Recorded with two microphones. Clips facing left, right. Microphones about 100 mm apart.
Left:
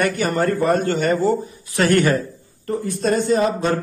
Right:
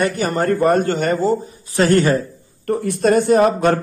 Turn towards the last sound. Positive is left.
turn(degrees=-60)  # may be behind; listen again after turning